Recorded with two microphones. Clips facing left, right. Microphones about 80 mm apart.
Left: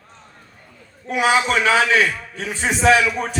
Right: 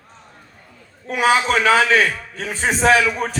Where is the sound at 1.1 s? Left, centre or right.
Right.